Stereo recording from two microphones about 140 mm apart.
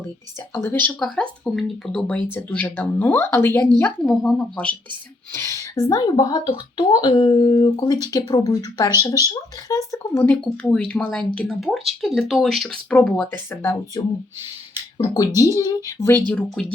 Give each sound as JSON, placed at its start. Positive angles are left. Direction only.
{"t": 0.5, "sound": "speech", "side_deg": 15}
{"t": 0.9, "sound": "speech", "side_deg": 5}
{"t": 5.3, "sound": "speech", "side_deg": 20}
{"t": 10.3, "sound": "speech", "side_deg": 5}
{"t": 14.0, "sound": "speech", "side_deg": 25}
{"t": 15.4, "sound": "speech", "side_deg": 25}
{"t": 16.6, "sound": "speech", "side_deg": 5}